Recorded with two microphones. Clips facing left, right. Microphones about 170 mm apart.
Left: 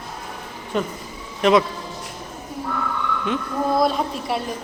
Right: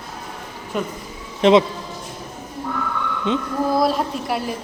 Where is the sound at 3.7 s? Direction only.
Centre (ahead or behind).